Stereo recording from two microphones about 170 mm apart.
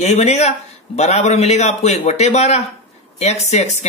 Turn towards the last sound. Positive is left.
turn(degrees=40)  # may be behind; listen again after turning